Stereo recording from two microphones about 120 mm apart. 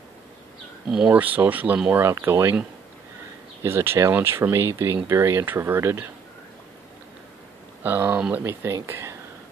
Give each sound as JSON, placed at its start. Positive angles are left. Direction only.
{"t": 0.8, "sound": "speech", "side_deg": -5}
{"t": 3.6, "sound": "speech", "side_deg": -20}
{"t": 7.8, "sound": "speech", "side_deg": -15}